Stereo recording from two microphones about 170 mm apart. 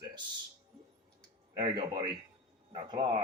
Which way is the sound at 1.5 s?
25° right (ahead or behind).